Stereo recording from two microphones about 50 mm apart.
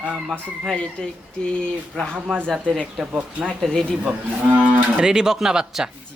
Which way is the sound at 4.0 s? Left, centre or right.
Right.